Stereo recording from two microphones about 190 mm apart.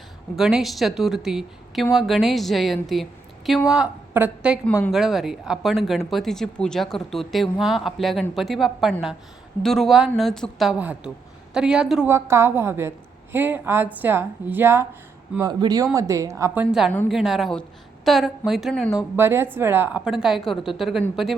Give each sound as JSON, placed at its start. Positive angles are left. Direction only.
{"t": 0.3, "sound": "a woman's voice", "side_deg": 0}
{"t": 4.6, "sound": "a woman's voice", "side_deg": 10}
{"t": 4.9, "sound": "a woman's voice", "side_deg": 0}
{"t": 17.1, "sound": "a woman's voice", "side_deg": 0}
{"t": 19.1, "sound": "a woman's voice", "side_deg": -10}